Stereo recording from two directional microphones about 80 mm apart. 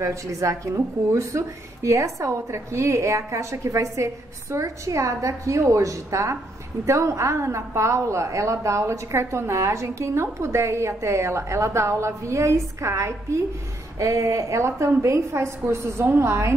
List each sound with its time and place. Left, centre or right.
0.0 s speech: right